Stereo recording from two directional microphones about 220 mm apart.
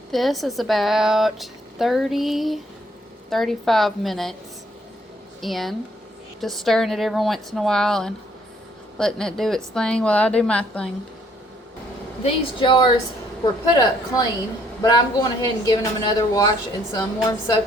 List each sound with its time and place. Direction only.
0.1 s a woman's voice: centre (ahead or behind)
5.4 s a woman's voice: centre (ahead or behind)
12.2 s speech: 20° left (ahead or behind)